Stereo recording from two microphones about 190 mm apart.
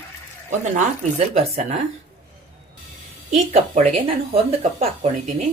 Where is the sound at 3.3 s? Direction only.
35° right (ahead or behind).